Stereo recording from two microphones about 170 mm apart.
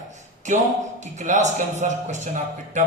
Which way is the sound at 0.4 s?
45° right (ahead or behind).